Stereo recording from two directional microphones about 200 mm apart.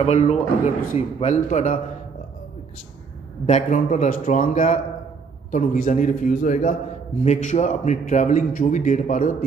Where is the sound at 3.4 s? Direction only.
35° left (ahead or behind).